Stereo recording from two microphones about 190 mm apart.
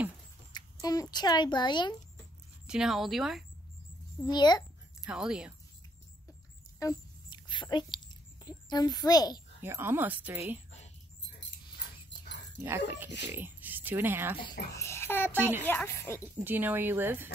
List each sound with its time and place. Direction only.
0.5 s a sound: 20° left (ahead or behind)
1.1 s speech: 20° left (ahead or behind)
2.6 s speech: 5° right (ahead or behind)
4.2 s speech: 20° left (ahead or behind)
5.0 s speech: 5° right (ahead or behind)
6.8 s a sound: 20° left (ahead or behind)
8.5 s a child's voice: 20° left (ahead or behind)
9.6 s speech: 10° right (ahead or behind)
12.6 s speech: 10° right (ahead or behind)
14.7 s a child's voice: 15° left (ahead or behind)
15.3 s speech: 10° right (ahead or behind)
15.6 s speech: 10° left (ahead or behind)
16.4 s speech: 10° right (ahead or behind)